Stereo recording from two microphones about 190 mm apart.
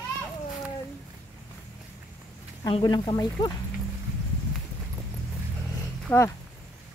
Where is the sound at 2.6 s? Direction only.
20° left (ahead or behind).